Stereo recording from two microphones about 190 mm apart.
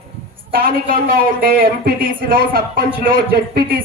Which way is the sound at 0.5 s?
50° right (ahead or behind).